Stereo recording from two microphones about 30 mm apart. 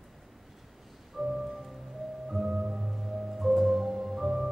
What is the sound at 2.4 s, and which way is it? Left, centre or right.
Organ, right.